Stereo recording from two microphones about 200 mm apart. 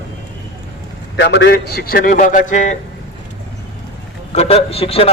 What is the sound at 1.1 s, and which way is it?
A man's voice, 60° left (ahead or behind).